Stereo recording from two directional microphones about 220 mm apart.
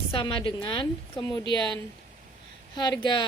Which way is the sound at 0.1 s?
25° left (ahead or behind).